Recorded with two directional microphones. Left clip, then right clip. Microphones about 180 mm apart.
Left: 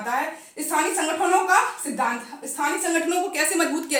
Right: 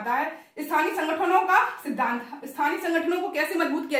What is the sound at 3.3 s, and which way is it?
Speech, 20° left (ahead or behind).